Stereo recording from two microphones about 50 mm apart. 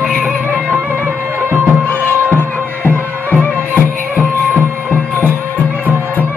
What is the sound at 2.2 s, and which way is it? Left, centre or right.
Music, left.